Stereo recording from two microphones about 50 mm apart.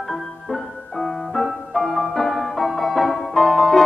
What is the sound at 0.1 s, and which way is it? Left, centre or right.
Music, centre.